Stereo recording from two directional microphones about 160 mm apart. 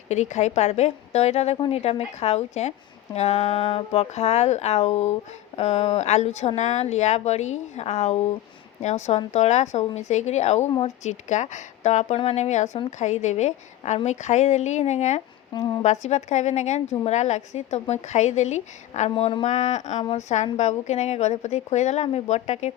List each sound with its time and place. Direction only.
0.1 s a woman's voice: 45° left (ahead or behind)
15.5 s a woman's voice: 25° left (ahead or behind)
15.8 s a woman's voice: 45° left (ahead or behind)